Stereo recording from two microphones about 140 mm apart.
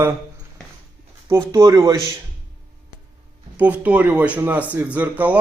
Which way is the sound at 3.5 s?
10° right (ahead or behind).